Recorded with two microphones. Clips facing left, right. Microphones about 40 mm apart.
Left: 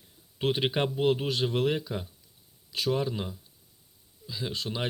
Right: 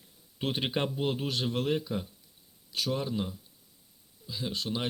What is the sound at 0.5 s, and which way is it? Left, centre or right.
Speech, centre.